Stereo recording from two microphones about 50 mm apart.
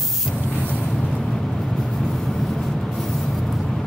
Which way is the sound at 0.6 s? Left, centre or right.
Left.